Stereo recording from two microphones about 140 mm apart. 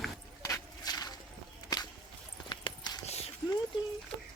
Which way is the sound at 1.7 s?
25° left (ahead or behind).